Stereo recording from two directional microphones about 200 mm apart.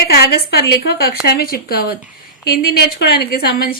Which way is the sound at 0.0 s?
50° left (ahead or behind).